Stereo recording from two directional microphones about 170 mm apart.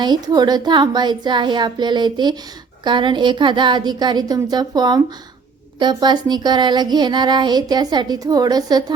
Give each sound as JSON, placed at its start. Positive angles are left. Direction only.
{"t": 0.0, "sound": "speech", "side_deg": -25}